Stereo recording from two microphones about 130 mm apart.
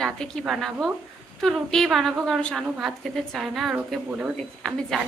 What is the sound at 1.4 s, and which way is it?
A woman's voice, centre (ahead or behind).